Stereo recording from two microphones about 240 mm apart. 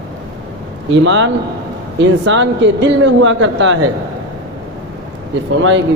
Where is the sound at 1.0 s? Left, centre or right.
Right.